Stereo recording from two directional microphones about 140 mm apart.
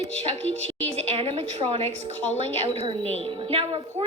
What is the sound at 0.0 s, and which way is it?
A woman's voice, 45° right (ahead or behind).